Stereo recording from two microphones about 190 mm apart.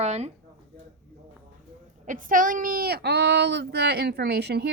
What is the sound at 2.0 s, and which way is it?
Speech, 45° right (ahead or behind).